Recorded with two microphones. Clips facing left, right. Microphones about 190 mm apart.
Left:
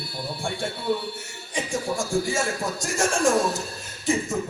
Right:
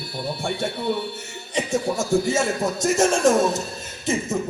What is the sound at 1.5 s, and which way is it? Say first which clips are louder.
Speech: right 4 dB; 20° right (ahead or behind).